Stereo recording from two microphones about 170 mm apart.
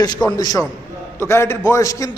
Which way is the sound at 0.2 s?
10° left (ahead or behind).